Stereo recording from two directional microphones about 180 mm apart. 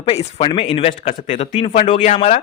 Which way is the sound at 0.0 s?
35° left (ahead or behind).